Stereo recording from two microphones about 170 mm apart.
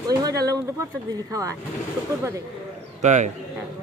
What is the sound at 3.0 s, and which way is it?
Speech, 45° right (ahead or behind).